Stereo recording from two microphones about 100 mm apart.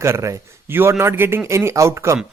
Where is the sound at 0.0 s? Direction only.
30° right (ahead or behind).